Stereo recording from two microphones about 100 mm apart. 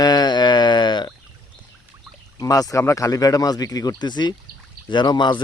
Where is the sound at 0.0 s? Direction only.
45° left (ahead or behind).